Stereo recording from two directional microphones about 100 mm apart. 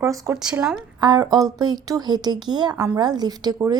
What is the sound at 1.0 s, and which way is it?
Speech, 40° right (ahead or behind).